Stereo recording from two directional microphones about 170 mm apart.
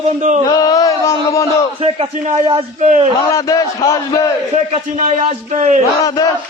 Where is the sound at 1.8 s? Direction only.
40° right (ahead or behind).